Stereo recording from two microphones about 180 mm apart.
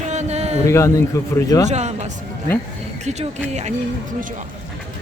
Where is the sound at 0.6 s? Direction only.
15° left (ahead or behind).